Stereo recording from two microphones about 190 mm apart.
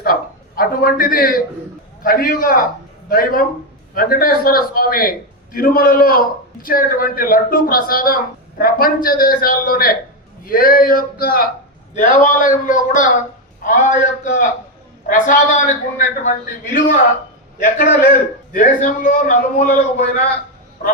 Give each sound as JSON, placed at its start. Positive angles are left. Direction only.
{"t": 0.0, "sound": "a man's voice", "side_deg": 50}